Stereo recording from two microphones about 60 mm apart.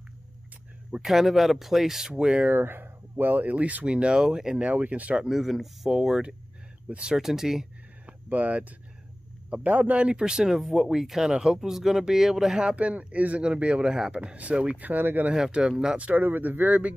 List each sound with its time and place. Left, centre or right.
1.0 s speech: centre
2.4 s speech: right
5.2 s speech: centre
7.2 s speech: centre
8.1 s speech: right
15.3 s speech: centre
16.0 s speech: right